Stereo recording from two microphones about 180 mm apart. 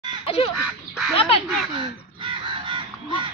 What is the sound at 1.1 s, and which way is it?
Duck, 35° left (ahead or behind).